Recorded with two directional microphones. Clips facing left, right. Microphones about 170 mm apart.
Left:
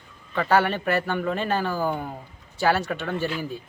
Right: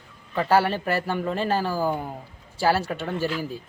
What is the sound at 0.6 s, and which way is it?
Speech, 35° right (ahead or behind).